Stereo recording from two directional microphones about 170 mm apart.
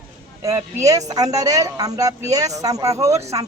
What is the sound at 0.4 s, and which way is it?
Speech, 20° right (ahead or behind).